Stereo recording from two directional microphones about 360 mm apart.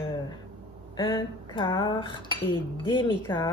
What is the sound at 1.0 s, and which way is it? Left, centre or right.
Speech, centre.